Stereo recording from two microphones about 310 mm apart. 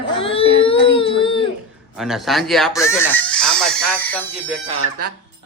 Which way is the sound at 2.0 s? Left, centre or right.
Centre.